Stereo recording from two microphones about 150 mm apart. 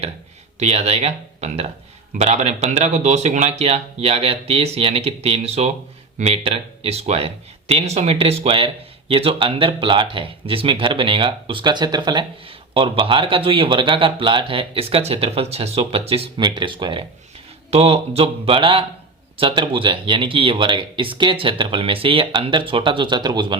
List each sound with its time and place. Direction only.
0.6 s speech: 45° right (ahead or behind); by 23.6 s 30° right (ahead or behind)